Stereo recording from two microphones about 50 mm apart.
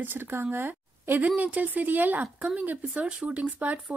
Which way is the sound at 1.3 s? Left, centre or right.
Right.